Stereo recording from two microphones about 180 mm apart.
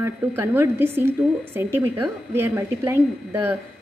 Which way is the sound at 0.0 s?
15° right (ahead or behind).